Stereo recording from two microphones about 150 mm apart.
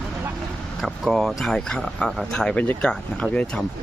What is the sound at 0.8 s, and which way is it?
Speech, centre (ahead or behind).